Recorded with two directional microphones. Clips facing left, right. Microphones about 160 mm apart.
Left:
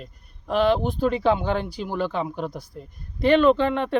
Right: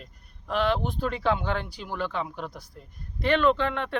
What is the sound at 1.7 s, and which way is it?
Speech, 10° left (ahead or behind).